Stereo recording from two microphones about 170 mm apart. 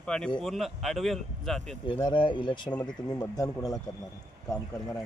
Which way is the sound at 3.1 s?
20° left (ahead or behind).